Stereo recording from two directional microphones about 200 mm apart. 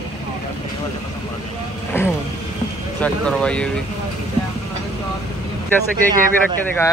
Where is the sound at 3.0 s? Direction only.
5° left (ahead or behind).